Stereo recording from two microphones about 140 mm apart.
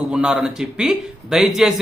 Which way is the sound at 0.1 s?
5° right (ahead or behind).